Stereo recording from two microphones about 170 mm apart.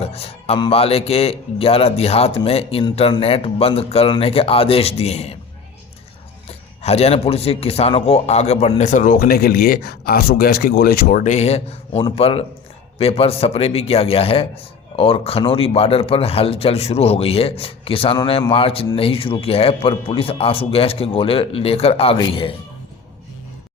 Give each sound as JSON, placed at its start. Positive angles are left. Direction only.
{"t": 0.0, "sound": "a man's voice", "side_deg": 35}
{"t": 6.5, "sound": "a man's voice", "side_deg": 35}